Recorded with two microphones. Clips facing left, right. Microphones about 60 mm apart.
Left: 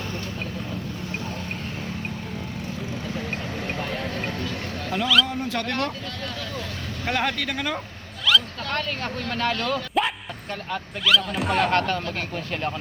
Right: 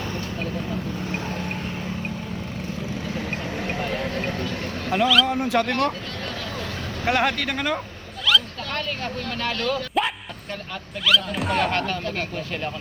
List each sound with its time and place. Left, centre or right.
3.8 s vehicle: centre
5.0 s speech: centre
5.4 s speech: centre
7.1 s speech: centre
8.3 s vehicle: centre
9.4 s speech: centre
9.7 s speech: centre